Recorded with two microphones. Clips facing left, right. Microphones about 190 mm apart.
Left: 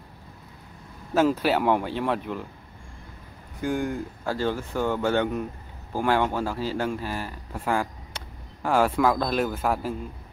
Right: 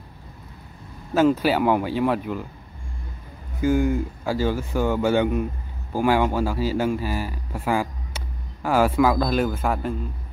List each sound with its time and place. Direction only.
1.1 s speech: centre (ahead or behind)
3.6 s speech: centre (ahead or behind)